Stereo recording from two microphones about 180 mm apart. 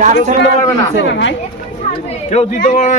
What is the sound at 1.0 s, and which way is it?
Speech, 90° left.